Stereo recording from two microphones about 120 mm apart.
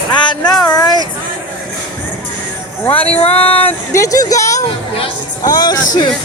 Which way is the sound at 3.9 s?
25° left (ahead or behind).